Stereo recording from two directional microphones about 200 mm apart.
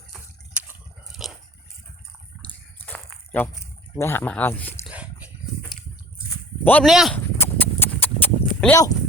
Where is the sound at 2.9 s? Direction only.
10° left (ahead or behind).